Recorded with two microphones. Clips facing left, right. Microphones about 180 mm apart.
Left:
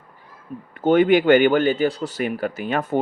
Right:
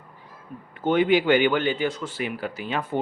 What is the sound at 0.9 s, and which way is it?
Speech, 50° left (ahead or behind).